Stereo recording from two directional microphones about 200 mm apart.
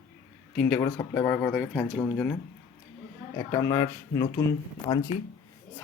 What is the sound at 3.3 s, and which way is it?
Speech, 15° left (ahead or behind).